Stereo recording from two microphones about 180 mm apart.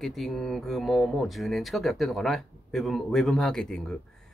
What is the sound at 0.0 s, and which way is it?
Speech, centre (ahead or behind).